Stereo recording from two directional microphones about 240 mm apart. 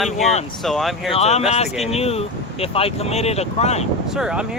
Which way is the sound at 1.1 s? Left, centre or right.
Left.